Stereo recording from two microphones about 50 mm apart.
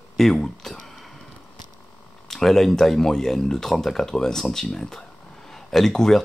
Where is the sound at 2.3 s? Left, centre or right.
Centre.